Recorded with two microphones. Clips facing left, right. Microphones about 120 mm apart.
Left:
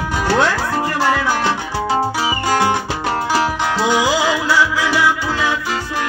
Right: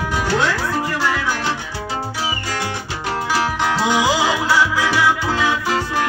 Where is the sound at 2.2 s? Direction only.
90° left.